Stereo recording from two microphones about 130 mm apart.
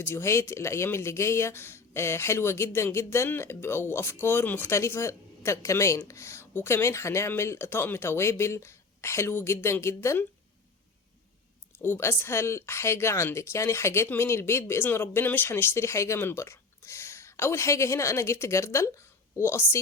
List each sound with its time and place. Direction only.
0.0 s speech: 20° left (ahead or behind)
11.8 s speech: 20° left (ahead or behind)